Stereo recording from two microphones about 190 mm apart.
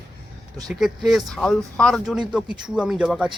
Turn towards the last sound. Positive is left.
turn(degrees=-5)  # may be behind; listen again after turning